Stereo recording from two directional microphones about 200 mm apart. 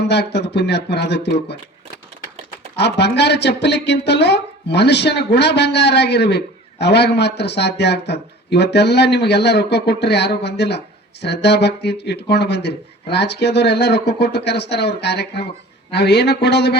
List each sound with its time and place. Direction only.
0.1 s speech: 60° left (ahead or behind)
2.7 s speech: 55° left (ahead or behind)